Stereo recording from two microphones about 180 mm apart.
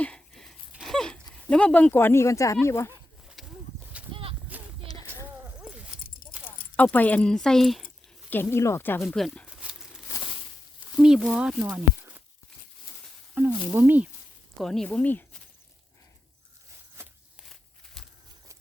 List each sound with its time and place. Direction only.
0.0 s a sound: 5° left (ahead or behind)
1.5 s speech: 5° left (ahead or behind)
3.4 s a sound: centre (ahead or behind)
4.1 s horse: 30° right (ahead or behind)
4.9 s a sound: 20° left (ahead or behind)
5.5 s keys jangling: 5° right (ahead or behind)
6.4 s speech: 10° left (ahead or behind)
8.5 s speech: 15° left (ahead or behind)
9.0 s speech: centre (ahead or behind)
9.5 s crumpling: 5° right (ahead or behind)
10.9 s speech: centre (ahead or behind)
13.3 s speech: 10° right (ahead or behind)
14.6 s speech: centre (ahead or behind)
17.4 s a sound: centre (ahead or behind)